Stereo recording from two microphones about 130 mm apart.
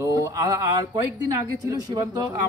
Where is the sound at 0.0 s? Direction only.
25° right (ahead or behind).